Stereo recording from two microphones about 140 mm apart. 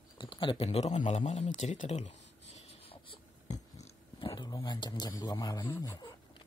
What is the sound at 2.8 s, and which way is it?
Writing, 40° left (ahead or behind).